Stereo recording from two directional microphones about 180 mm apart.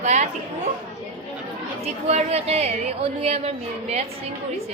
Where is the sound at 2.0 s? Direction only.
35° right (ahead or behind).